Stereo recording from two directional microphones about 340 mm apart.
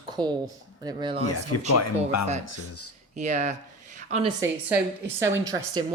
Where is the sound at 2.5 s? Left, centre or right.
Left.